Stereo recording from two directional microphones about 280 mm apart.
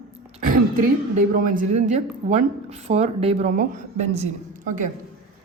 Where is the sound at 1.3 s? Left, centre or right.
Right.